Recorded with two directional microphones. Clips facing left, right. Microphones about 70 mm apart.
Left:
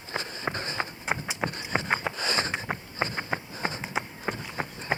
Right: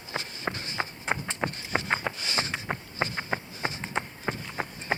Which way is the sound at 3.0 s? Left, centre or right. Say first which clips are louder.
Left 1 dB; left.